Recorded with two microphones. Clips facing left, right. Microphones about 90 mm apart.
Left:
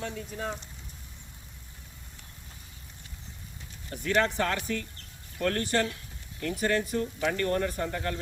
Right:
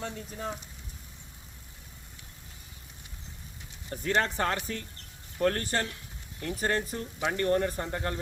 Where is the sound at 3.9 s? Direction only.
30° right (ahead or behind).